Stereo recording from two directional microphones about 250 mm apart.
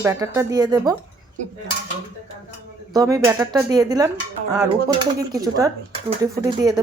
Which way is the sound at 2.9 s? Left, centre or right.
Centre.